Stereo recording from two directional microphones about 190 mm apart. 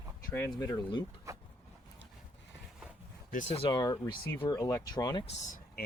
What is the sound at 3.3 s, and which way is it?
Speech, 35° left (ahead or behind).